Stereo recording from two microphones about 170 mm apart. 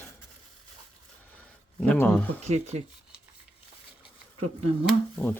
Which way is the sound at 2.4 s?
40° right (ahead or behind).